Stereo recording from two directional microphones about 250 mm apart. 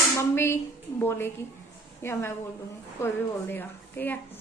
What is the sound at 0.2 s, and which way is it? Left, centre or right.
A woman's voice, centre.